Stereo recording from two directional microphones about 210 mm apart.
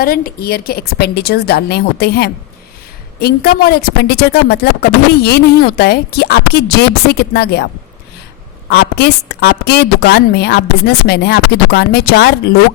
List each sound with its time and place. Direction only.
0.0 s speech: 45° left (ahead or behind)
8.7 s speech: 50° left (ahead or behind)